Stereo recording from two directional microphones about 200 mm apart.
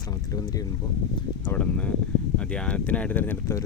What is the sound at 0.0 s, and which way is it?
Boat, 20° left (ahead or behind).